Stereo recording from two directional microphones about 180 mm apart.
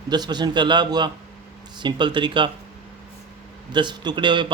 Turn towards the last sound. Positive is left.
turn(degrees=-25)  # may be behind; listen again after turning